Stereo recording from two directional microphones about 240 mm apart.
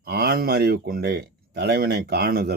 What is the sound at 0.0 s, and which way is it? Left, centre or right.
Speech, right.